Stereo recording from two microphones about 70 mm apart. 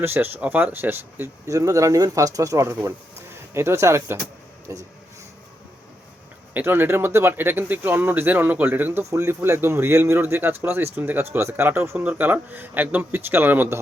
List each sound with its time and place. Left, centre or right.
0.0 s speech: right
4.7 s speech: right
6.5 s speech: right
12.0 s speech: right